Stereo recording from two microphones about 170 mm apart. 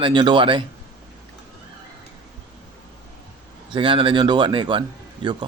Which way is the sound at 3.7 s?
30° right (ahead or behind).